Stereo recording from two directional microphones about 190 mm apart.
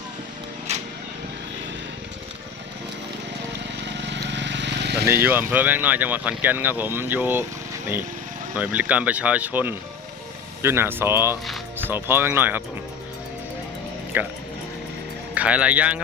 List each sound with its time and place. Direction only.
0.7 s a sound: 35° right (ahead or behind)
3.6 s vehicle: 65° right (ahead or behind)
5.0 s speech: 10° right (ahead or behind)
8.5 s speech: 10° right (ahead or behind)
14.1 s speech: 10° right (ahead or behind)
15.4 s speech: 5° right (ahead or behind)